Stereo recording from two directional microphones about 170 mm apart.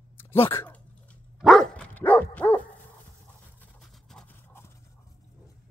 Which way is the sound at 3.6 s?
5° left (ahead or behind).